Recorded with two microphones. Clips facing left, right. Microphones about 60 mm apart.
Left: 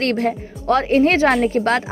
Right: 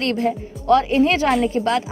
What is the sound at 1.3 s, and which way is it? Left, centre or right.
Speech, left.